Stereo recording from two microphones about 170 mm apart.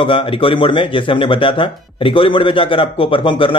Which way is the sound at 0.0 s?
30° left (ahead or behind).